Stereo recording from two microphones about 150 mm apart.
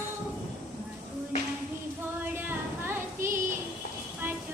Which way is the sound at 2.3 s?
15° right (ahead or behind).